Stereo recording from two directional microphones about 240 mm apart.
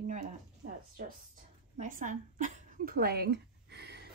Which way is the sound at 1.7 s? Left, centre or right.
Right.